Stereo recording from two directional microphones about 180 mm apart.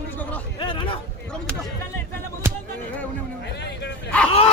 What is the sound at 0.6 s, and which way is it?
Speech, 25° left (ahead or behind).